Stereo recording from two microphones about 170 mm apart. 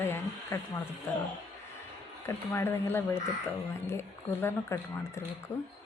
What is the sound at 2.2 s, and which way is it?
Speech, 15° left (ahead or behind).